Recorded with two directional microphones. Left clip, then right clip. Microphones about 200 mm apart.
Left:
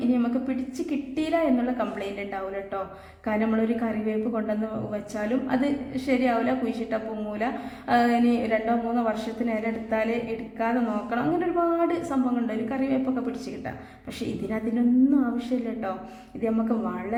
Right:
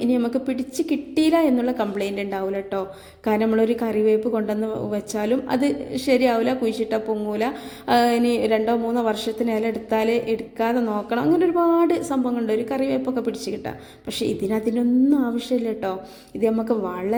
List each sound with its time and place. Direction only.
0.1 s a woman's voice: 35° right (ahead or behind)